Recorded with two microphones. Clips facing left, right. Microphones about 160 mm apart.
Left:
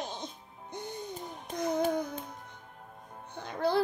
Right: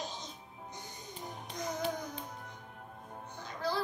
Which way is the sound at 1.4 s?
55° left (ahead or behind).